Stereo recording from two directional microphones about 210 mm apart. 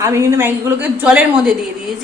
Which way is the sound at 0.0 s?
15° right (ahead or behind).